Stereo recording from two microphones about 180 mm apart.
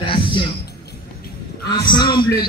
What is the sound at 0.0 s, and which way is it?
Music, 25° left (ahead or behind).